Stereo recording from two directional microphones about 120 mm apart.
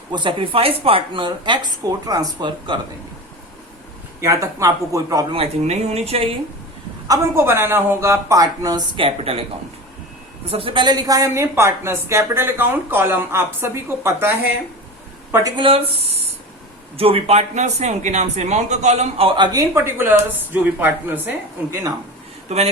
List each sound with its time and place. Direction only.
0.1 s speech: 40° right (ahead or behind)
4.2 s speech: 25° right (ahead or behind)
5.3 s speech: 60° right (ahead or behind)
7.3 s speech: 20° right (ahead or behind)
9.0 s speech: 50° right (ahead or behind)
10.5 s speech: 50° right (ahead or behind); by 14.3 s 20° right (ahead or behind)
15.5 s speech: 50° right (ahead or behind)
19.5 s speech: 20° right (ahead or behind)
22.4 s speech: 60° right (ahead or behind)